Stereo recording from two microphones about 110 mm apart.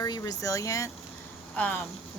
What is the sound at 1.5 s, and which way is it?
Speech, 15° left (ahead or behind).